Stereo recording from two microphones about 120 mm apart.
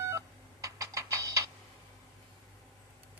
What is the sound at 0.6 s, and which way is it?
Clock, 25° right (ahead or behind).